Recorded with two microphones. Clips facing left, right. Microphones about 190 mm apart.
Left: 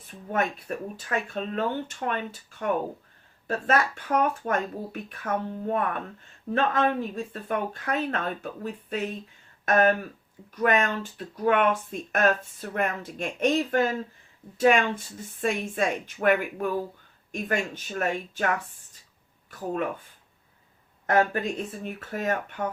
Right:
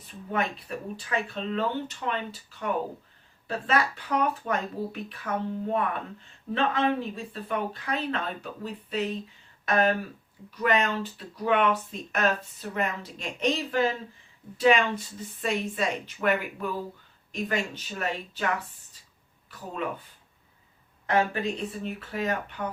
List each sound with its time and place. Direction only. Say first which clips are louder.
0.3 s speech: left 2 dB; 50° left (ahead or behind)
21.1 s speech: left 2 dB; 45° left (ahead or behind)